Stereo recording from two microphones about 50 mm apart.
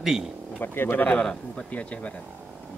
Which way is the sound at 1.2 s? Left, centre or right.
Centre.